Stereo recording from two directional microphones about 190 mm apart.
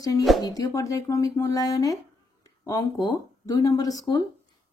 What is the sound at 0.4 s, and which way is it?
Speech, 20° left (ahead or behind).